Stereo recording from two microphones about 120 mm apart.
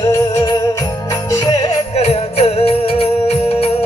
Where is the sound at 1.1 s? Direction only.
30° left (ahead or behind).